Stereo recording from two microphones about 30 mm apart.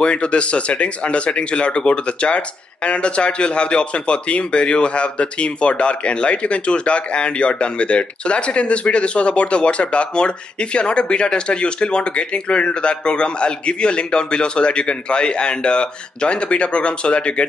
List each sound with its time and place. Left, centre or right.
0.0 s speech: left